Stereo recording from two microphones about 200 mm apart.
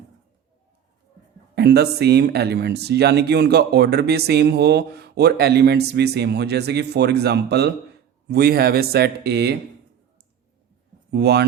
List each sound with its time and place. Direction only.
1.5 s speech: 55° right (ahead or behind)
11.1 s speech: 55° right (ahead or behind)